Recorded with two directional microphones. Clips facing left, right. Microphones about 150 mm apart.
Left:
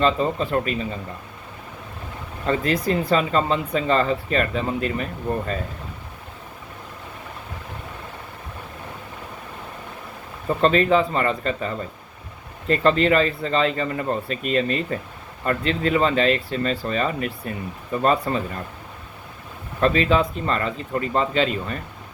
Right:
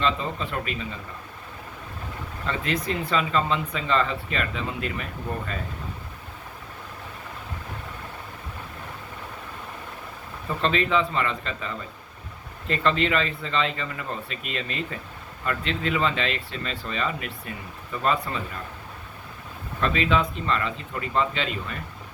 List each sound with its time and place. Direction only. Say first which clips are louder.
0.0 s speech: left 6 dB; 40° left (ahead or behind)
2.5 s speech: left 6 dB; 35° left (ahead or behind)
10.6 s speech: left 6 dB; 40° left (ahead or behind)
19.8 s speech: left 5 dB; 40° left (ahead or behind)